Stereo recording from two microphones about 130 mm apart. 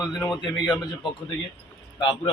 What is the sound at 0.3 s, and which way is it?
Speech, 35° left (ahead or behind).